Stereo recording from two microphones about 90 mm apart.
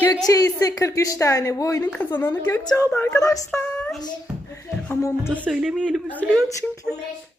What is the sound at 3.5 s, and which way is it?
Female singing, 15° left (ahead or behind).